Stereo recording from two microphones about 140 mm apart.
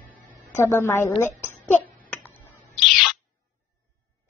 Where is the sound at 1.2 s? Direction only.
15° left (ahead or behind).